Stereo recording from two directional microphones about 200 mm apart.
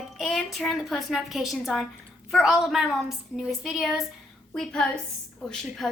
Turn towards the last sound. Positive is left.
turn(degrees=5)  # may be behind; listen again after turning